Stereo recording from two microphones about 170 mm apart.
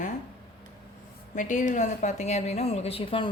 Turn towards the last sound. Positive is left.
turn(degrees=30)  # may be behind; listen again after turning